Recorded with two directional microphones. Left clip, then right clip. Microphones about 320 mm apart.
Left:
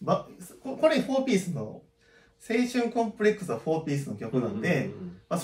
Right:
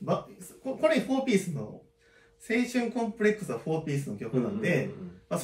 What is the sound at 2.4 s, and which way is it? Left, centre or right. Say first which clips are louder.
Speech: left 2 dB; centre.